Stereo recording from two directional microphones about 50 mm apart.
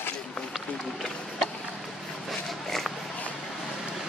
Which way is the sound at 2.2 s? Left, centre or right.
Centre.